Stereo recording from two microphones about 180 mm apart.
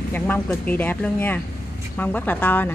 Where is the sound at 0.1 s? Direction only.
10° left (ahead or behind).